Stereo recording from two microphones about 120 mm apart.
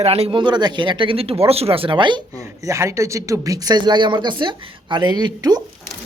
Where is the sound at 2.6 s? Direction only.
25° right (ahead or behind).